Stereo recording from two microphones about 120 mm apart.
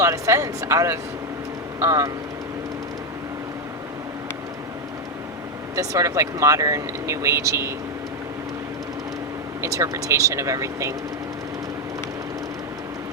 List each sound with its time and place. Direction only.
0.0 s speech: 25° right (ahead or behind)
5.7 s speech: 25° right (ahead or behind)
9.6 s speech: 25° right (ahead or behind)